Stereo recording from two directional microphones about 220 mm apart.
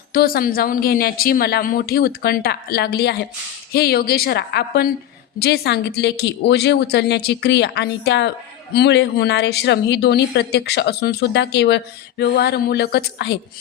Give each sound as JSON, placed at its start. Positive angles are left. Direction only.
{"t": 0.1, "sound": "speech", "side_deg": 40}